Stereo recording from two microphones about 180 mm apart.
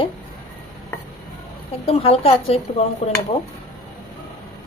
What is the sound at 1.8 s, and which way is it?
Speech, 35° left (ahead or behind).